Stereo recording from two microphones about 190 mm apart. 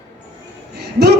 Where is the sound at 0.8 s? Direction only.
60° right (ahead or behind).